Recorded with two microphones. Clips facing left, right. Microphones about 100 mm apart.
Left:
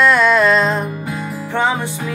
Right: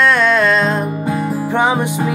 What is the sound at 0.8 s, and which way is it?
Music, 40° right (ahead or behind).